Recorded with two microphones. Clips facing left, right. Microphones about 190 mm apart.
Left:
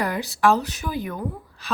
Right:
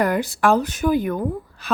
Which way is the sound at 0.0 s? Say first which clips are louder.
Right 2 dB; 50° right (ahead or behind).